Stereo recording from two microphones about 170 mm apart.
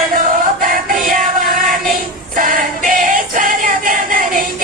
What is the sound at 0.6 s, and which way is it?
Music, 55° right (ahead or behind).